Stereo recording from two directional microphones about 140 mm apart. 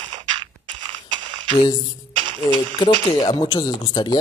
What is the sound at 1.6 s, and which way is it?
A man's voice, 30° left (ahead or behind).